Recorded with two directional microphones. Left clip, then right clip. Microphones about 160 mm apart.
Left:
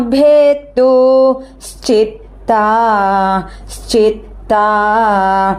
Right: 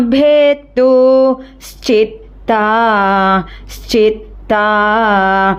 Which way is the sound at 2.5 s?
15° right (ahead or behind).